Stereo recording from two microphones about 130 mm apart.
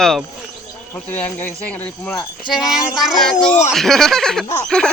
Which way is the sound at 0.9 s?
15° left (ahead or behind).